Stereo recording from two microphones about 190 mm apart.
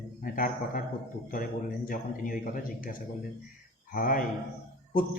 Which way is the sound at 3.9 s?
45° left (ahead or behind).